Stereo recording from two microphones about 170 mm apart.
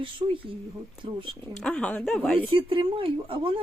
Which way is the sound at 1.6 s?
5° left (ahead or behind).